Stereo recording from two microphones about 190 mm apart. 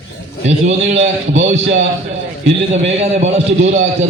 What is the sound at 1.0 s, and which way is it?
Speech, 75° right (ahead or behind).